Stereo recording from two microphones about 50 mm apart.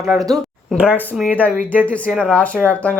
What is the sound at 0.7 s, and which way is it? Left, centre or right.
Speech, right.